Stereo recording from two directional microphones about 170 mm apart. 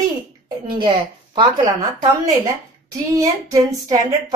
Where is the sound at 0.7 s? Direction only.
30° right (ahead or behind).